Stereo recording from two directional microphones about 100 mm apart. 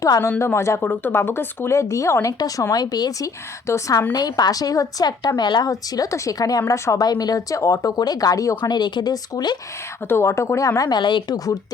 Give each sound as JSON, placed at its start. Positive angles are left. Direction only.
{"t": 0.0, "sound": "speech", "side_deg": 35}
{"t": 10.1, "sound": "speech", "side_deg": 25}